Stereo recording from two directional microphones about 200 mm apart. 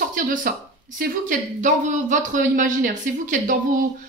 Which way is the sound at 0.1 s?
45° right (ahead or behind).